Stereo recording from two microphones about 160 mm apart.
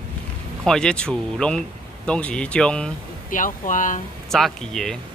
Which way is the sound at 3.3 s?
55° left (ahead or behind).